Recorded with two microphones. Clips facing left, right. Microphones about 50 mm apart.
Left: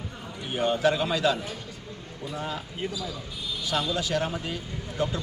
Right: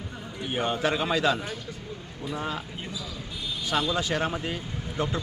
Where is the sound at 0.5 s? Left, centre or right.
Centre.